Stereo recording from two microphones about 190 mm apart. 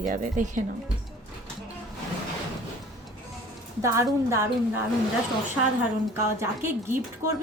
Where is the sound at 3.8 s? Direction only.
15° right (ahead or behind).